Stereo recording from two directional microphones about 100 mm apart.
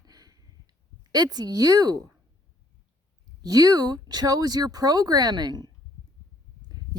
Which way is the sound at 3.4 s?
40° right (ahead or behind).